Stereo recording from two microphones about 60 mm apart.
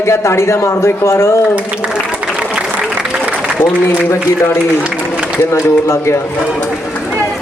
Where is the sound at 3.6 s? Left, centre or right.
Left.